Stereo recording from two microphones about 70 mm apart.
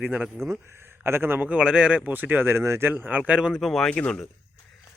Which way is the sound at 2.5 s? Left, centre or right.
Right.